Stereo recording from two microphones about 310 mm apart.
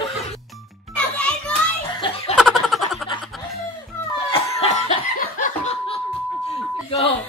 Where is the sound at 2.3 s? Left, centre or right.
Centre.